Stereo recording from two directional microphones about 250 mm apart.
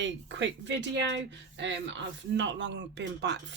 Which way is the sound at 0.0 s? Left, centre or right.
Right.